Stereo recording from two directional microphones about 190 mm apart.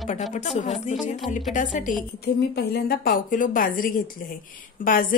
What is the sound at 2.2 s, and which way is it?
A woman's voice, 60° left (ahead or behind).